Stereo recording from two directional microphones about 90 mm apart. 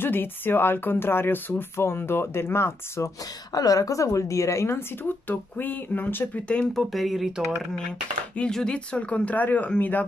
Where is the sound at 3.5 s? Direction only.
45° left (ahead or behind); by 6.4 s 20° left (ahead or behind).